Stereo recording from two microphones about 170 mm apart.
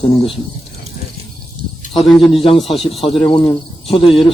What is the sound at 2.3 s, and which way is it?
Speech, 35° left (ahead or behind).